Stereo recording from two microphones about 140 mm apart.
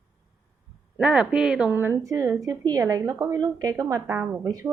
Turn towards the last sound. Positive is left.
turn(degrees=-25)  # may be behind; listen again after turning